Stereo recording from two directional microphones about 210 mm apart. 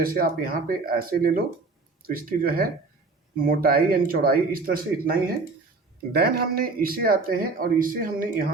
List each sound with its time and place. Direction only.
0.0 s speech: 45° right (ahead or behind)